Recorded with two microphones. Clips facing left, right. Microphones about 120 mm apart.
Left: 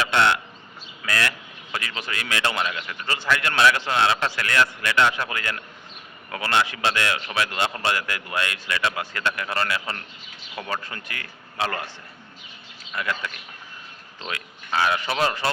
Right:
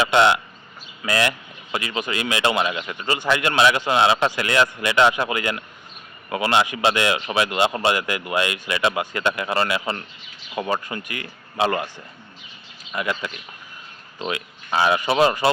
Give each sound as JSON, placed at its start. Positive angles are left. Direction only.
{"t": 0.0, "sound": "speech", "side_deg": -20}
{"t": 12.9, "sound": "speech", "side_deg": -15}